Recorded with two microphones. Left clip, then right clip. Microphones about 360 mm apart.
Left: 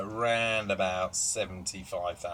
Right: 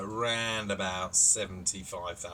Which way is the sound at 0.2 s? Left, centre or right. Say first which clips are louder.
Left 3 dB; centre.